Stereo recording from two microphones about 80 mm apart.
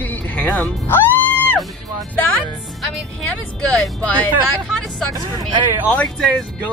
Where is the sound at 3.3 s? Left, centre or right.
Centre.